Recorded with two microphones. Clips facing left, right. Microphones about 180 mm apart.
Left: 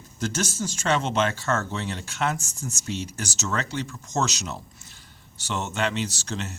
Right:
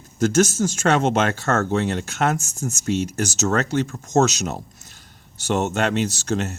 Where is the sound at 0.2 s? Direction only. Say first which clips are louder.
Right 10 dB; 45° right (ahead or behind).